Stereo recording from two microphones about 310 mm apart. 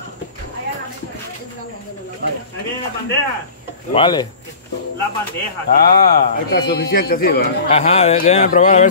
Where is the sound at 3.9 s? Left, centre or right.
Centre.